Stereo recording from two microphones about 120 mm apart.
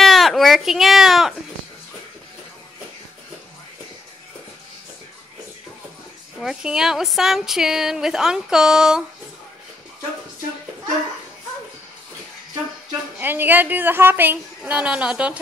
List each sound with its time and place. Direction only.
0.0 s speech: centre (ahead or behind)
6.4 s a woman's voice: 5° right (ahead or behind)
13.2 s a woman's voice: 15° right (ahead or behind)